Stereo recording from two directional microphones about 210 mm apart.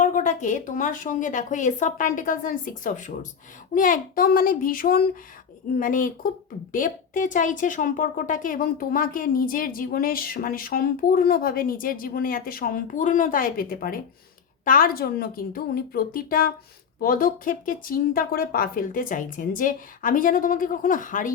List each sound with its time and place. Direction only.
0.0 s speech: 35° left (ahead or behind)